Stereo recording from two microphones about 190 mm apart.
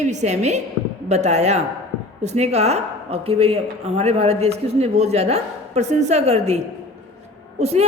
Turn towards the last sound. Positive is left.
turn(degrees=-35)  # may be behind; listen again after turning